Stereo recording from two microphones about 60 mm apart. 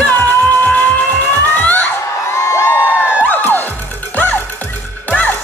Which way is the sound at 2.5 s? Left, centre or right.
Left.